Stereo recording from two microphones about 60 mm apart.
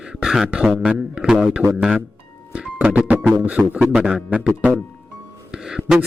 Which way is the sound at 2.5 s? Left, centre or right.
Right.